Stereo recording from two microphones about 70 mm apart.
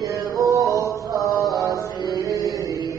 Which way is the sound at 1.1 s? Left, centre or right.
Right.